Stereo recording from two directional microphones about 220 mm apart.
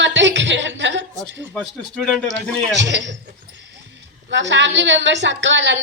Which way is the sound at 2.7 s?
55° right (ahead or behind).